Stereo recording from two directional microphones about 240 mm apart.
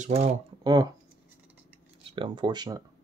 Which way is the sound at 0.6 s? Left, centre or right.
Centre.